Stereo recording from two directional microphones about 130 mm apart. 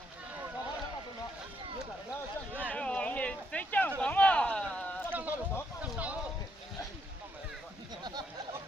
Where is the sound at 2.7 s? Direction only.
10° left (ahead or behind).